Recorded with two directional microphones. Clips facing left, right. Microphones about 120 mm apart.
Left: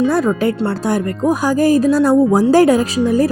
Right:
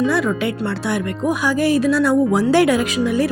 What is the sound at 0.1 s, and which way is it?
Speech, 40° left (ahead or behind).